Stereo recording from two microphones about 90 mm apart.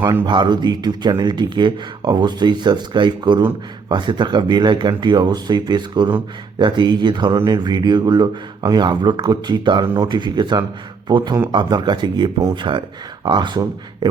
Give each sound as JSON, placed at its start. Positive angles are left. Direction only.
{"t": 0.3, "sound": "speech", "side_deg": -55}
{"t": 12.7, "sound": "speech", "side_deg": -70}
{"t": 13.2, "sound": "speech", "side_deg": -60}